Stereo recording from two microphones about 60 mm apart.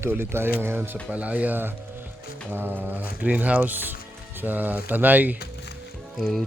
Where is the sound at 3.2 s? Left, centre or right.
Right.